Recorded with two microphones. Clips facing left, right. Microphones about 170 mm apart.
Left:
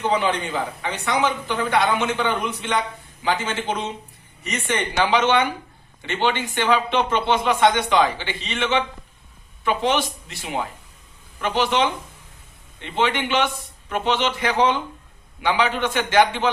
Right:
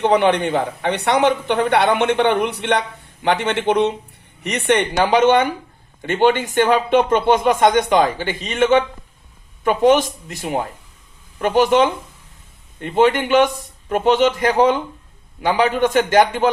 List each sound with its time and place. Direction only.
0.0 s speech: 65° right (ahead or behind)
5.0 s speech: 45° right (ahead or behind)